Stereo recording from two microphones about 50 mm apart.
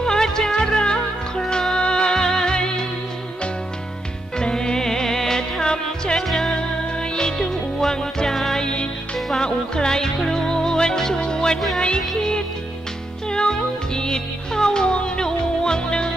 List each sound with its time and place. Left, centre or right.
0.0 s music: centre
4.4 s music: centre
6.2 s music: centre
6.6 s music: centre
8.6 s music: centre